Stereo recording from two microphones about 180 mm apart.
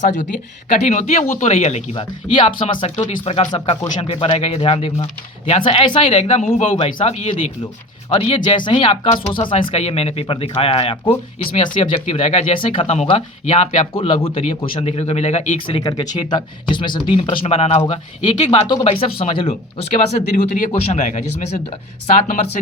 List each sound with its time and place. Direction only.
0.7 s speech: 40° left (ahead or behind)